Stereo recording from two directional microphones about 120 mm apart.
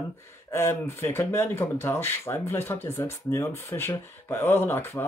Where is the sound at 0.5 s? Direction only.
20° left (ahead or behind).